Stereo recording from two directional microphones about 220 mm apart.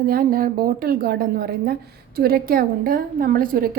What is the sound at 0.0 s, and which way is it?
A woman's voice, 40° right (ahead or behind).